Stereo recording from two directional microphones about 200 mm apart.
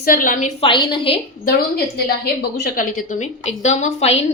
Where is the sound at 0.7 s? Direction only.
25° left (ahead or behind).